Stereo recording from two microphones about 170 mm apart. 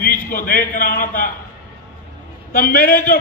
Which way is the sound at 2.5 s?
60° left (ahead or behind).